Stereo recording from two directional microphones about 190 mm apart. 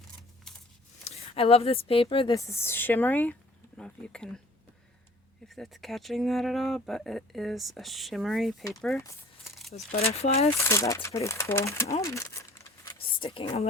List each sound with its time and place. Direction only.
1.0 s speech: 30° left (ahead or behind)
2.3 s speech: 15° left (ahead or behind)
5.5 s speech: centre (ahead or behind)
10.0 s speech: 35° left (ahead or behind)
10.6 s speech: 15° left (ahead or behind)
12.0 s crumpling: 15° left (ahead or behind)
13.0 s speech: 30° left (ahead or behind)